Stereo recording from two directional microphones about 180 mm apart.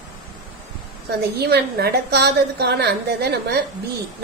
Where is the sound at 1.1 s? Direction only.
65° right (ahead or behind).